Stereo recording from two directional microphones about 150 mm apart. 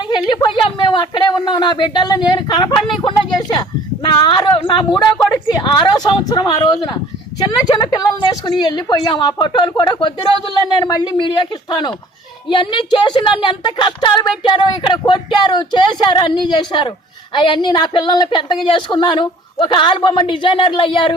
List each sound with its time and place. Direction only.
0.1 s a woman's voice: 30° left (ahead or behind)